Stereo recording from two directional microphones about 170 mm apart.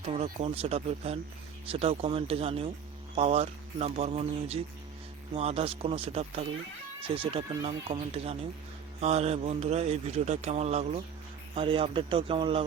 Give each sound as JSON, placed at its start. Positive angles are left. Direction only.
{"t": 0.0, "sound": "a man's voice", "side_deg": -40}